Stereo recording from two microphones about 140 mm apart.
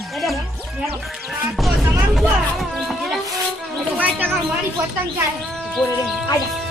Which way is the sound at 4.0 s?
15° right (ahead or behind).